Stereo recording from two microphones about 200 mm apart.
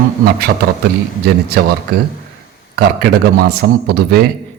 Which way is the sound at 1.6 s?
55° right (ahead or behind).